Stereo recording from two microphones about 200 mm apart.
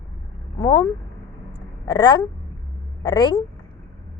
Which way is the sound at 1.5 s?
20° left (ahead or behind).